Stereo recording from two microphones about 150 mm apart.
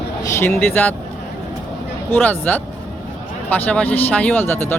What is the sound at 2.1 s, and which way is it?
Speech, 10° left (ahead or behind).